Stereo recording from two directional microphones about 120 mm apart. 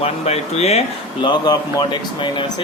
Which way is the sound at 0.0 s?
60° left (ahead or behind).